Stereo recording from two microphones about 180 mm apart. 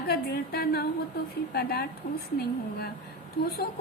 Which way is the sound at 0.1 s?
60° left (ahead or behind).